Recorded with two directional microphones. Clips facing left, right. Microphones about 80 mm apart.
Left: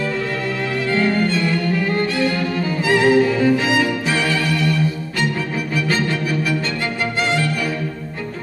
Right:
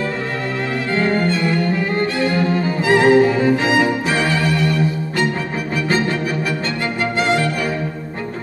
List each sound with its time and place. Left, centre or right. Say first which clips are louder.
0.9 s violin: right 1 dB; right
7.0 s music: right 3 dB; right